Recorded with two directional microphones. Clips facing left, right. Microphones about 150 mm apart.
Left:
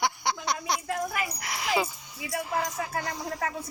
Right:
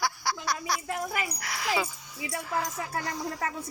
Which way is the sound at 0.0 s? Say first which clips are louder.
Left 2 dB; 20° left (ahead or behind).